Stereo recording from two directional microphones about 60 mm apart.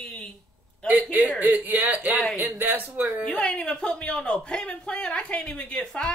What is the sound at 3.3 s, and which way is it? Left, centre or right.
A man's voice, centre.